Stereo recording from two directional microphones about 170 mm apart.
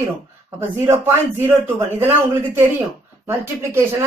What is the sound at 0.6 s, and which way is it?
Speech, 15° right (ahead or behind).